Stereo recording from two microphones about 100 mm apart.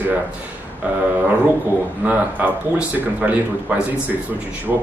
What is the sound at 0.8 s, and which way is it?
Speech, 15° right (ahead or behind).